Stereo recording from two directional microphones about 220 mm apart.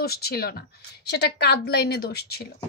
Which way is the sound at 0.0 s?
45° left (ahead or behind).